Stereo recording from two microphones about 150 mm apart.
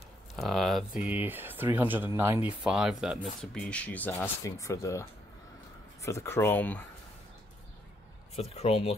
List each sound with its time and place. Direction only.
0.4 s speech: centre (ahead or behind)
1.0 s speech: 10° right (ahead or behind); by 5.0 s 20° left (ahead or behind)
6.0 s speech: 15° left (ahead or behind)
8.4 s speech: 45° left (ahead or behind)